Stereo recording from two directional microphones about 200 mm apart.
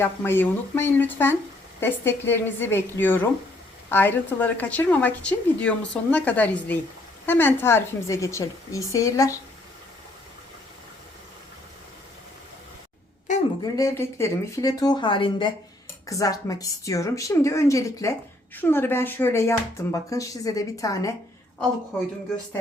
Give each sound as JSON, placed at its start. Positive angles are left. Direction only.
{"t": 0.0, "sound": "a woman's voice", "side_deg": 10}
{"t": 13.7, "sound": "a woman's voice", "side_deg": 15}